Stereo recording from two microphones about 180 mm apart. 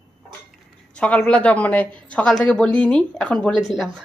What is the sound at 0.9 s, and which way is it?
A woman's voice, 5° left (ahead or behind).